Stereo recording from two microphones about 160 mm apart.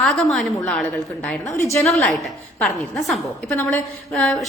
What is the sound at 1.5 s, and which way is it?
Speech, 20° left (ahead or behind).